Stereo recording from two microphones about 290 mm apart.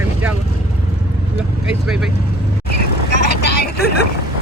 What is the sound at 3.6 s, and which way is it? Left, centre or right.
Vehicle, left.